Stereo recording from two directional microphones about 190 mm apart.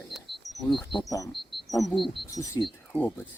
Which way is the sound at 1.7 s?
Centre (ahead or behind).